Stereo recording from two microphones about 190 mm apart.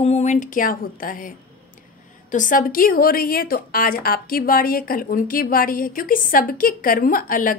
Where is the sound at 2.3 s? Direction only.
45° left (ahead or behind).